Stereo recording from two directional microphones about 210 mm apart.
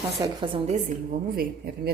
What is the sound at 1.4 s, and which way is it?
Speech, 45° right (ahead or behind).